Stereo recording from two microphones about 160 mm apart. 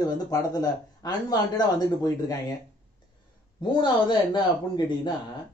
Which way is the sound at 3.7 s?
30° left (ahead or behind).